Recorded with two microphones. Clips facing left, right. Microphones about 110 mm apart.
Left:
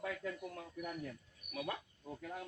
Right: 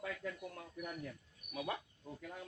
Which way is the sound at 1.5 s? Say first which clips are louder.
Right 1 dB; 10° right (ahead or behind).